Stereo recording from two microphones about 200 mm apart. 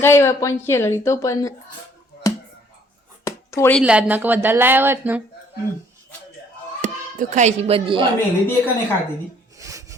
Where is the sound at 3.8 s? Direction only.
5° right (ahead or behind).